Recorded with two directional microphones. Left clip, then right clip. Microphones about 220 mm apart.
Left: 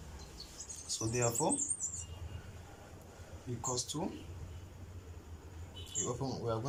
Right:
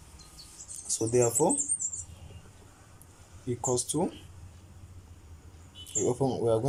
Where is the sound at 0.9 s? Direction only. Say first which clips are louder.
Right 9 dB; 25° right (ahead or behind).